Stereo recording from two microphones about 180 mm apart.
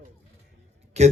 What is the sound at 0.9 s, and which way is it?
Speech, 40° right (ahead or behind).